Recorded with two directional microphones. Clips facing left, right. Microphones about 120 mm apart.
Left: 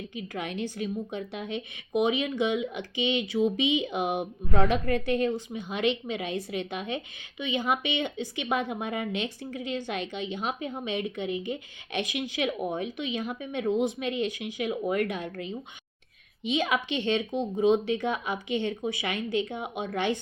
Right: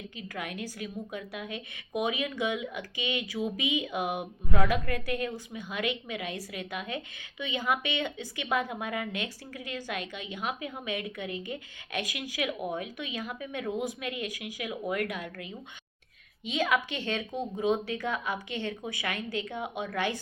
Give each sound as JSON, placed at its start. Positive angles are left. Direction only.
{"t": 0.2, "sound": "a woman's voice", "side_deg": 25}